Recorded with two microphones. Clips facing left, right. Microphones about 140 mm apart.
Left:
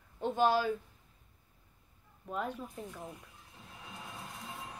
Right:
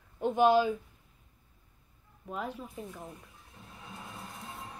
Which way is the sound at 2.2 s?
5° right (ahead or behind).